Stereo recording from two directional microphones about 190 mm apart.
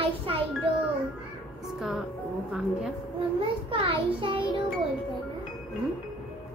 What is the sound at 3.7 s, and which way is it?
Speech, 25° right (ahead or behind).